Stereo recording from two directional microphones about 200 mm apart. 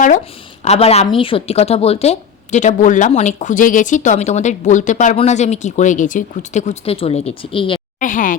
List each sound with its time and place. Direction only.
0.6 s a woman's voice: 30° left (ahead or behind)
7.9 s a woman's voice: 40° left (ahead or behind)